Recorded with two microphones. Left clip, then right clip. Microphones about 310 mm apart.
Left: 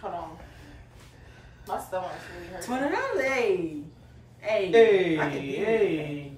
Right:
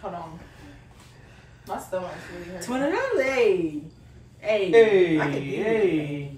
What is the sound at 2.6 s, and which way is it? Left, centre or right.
Speech, centre.